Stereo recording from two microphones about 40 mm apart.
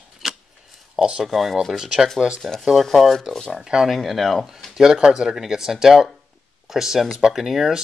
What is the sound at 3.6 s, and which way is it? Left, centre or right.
Speech, centre.